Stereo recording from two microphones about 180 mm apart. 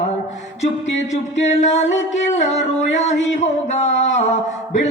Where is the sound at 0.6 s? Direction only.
85° left.